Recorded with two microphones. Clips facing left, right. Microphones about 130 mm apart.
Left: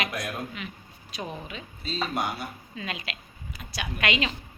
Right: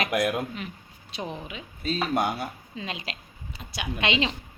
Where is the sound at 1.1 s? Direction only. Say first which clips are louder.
Right 1 dB; 20° right (ahead or behind).